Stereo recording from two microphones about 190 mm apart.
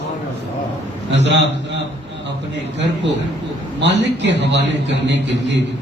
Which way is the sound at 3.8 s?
65° right (ahead or behind).